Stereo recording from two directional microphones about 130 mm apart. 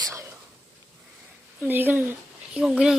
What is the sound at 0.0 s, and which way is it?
Whispering, 25° right (ahead or behind).